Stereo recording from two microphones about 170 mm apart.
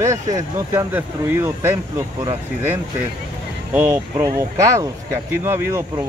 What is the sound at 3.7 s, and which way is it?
Speech, 15° right (ahead or behind).